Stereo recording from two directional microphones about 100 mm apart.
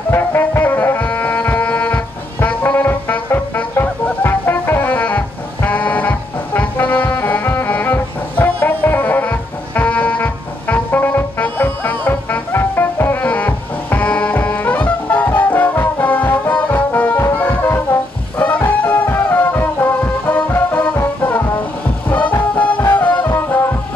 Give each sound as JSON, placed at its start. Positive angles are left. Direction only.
{"t": 0.1, "sound": "music", "side_deg": 20}
{"t": 22.1, "sound": "music", "side_deg": 15}